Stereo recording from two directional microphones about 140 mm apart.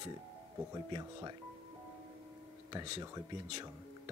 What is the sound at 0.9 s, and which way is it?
Speech, 30° right (ahead or behind).